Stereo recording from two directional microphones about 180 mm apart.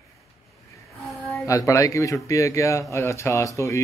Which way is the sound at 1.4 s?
15° left (ahead or behind).